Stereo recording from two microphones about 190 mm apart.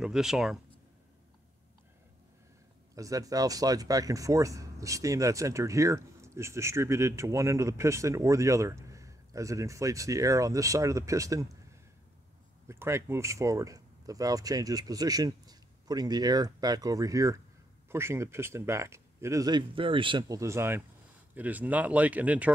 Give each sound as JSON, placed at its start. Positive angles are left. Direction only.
{"t": 0.0, "sound": "speech", "side_deg": -5}
{"t": 3.0, "sound": "speech", "side_deg": -20}
{"t": 12.6, "sound": "speech", "side_deg": -15}